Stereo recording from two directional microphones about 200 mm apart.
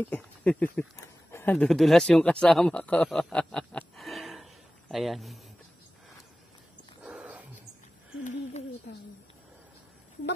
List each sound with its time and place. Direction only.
0.0 s speech: 5° left (ahead or behind)
7.0 s wild animals: 5° right (ahead or behind)
8.2 s a sound: 40° left (ahead or behind)